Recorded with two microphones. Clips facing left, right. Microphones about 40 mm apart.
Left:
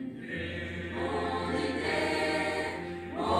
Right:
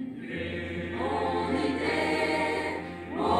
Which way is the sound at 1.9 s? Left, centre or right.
Right.